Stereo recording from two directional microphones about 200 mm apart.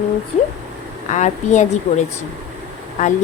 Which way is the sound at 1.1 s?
35° left (ahead or behind).